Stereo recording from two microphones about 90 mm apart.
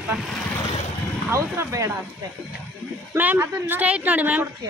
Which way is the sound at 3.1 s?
15° right (ahead or behind).